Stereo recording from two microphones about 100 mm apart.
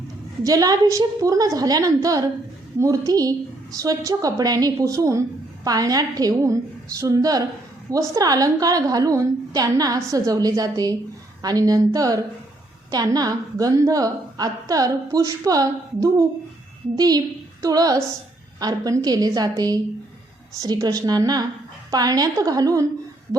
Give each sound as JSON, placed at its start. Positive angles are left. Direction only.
{"t": 0.4, "sound": "a woman's voice", "side_deg": -40}